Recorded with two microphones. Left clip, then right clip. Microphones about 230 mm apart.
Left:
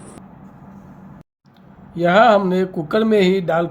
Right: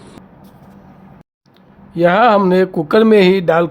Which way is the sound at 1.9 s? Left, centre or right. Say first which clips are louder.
Right 2 dB; right.